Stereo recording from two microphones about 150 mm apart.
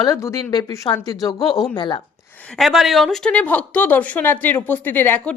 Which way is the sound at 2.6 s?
Centre (ahead or behind).